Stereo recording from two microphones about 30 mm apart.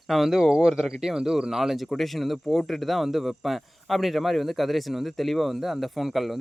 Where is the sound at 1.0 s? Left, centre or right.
Centre.